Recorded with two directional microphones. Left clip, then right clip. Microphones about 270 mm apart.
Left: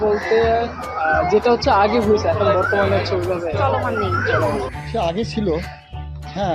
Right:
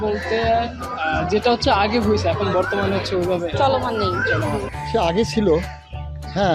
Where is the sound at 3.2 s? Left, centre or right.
Centre.